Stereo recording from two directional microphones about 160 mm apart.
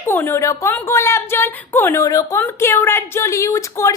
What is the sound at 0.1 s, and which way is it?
A woman's voice, 15° left (ahead or behind).